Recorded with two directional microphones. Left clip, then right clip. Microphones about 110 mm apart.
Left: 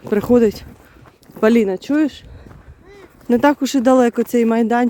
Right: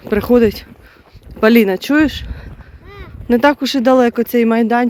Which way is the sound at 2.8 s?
40° right (ahead or behind).